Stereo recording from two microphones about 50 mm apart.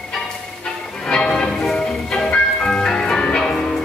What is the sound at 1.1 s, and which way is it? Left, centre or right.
Ice cream truck, centre.